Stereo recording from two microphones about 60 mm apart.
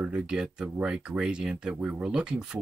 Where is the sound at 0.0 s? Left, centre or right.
Centre.